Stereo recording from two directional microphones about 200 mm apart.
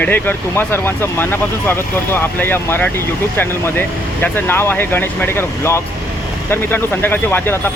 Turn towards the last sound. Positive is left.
turn(degrees=10)  # may be behind; listen again after turning